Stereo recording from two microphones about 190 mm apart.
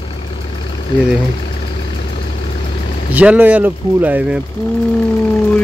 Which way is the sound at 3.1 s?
10° right (ahead or behind).